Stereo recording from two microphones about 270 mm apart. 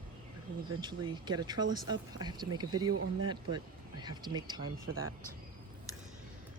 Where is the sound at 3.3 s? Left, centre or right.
Centre.